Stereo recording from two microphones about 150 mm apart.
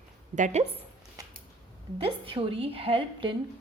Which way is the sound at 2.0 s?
35° right (ahead or behind).